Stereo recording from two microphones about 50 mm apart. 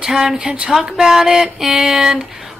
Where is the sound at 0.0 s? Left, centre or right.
Centre.